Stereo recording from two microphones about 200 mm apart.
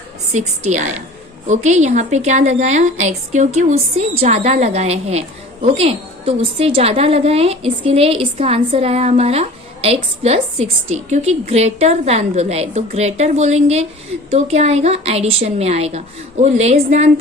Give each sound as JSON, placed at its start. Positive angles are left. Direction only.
{"t": 0.3, "sound": "a woman's voice", "side_deg": -35}